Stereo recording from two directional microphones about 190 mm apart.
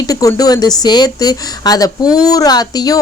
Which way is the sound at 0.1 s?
20° left (ahead or behind).